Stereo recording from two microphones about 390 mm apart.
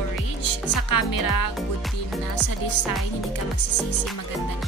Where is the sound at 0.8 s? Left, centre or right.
Left.